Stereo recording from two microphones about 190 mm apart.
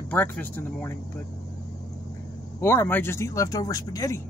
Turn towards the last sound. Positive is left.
turn(degrees=20)  # may be behind; listen again after turning